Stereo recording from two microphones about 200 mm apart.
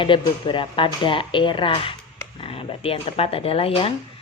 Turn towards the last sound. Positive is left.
turn(degrees=30)  # may be behind; listen again after turning